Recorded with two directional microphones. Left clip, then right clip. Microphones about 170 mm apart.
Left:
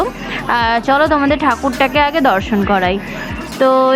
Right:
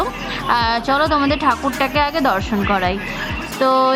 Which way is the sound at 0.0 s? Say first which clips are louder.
Left 3 dB; 15° left (ahead or behind).